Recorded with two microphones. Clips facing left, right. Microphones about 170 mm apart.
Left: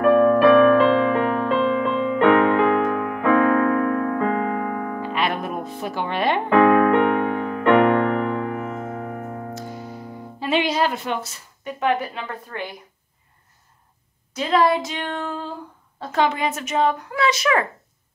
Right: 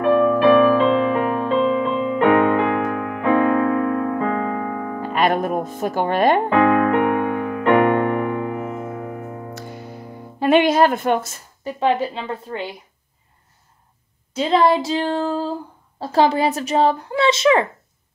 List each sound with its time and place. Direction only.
0.0 s music: 30° right (ahead or behind)
3.2 s piano: 25° right (ahead or behind)
5.0 s music: 45° right (ahead or behind)
6.5 s music: 35° left (ahead or behind)
7.6 s music: 25° right (ahead or behind)
9.5 s music: 65° right (ahead or behind); by 11.4 s 50° right (ahead or behind)
11.6 s a woman's voice: 30° right (ahead or behind)
14.3 s a woman's voice: 25° right (ahead or behind)